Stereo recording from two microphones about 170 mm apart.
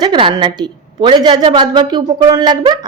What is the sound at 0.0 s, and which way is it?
Speech, 30° right (ahead or behind).